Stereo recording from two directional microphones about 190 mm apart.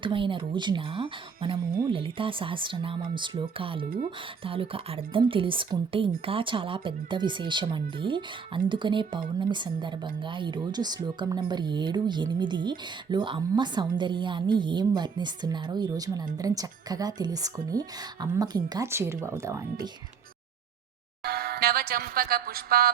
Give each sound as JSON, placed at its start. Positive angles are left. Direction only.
{"t": 0.0, "sound": "a woman's voice", "side_deg": -25}
{"t": 3.8, "sound": "speech", "side_deg": -50}
{"t": 4.4, "sound": "a woman's voice", "side_deg": -30}
{"t": 21.2, "sound": "a sound", "side_deg": -55}